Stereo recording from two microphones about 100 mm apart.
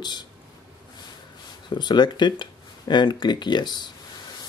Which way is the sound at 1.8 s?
50° left (ahead or behind).